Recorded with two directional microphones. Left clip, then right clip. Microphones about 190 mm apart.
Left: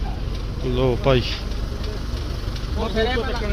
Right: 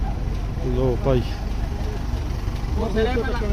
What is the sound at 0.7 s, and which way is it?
Speech, centre (ahead or behind).